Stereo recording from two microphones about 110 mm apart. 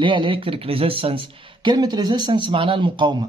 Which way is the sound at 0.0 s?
50° right (ahead or behind).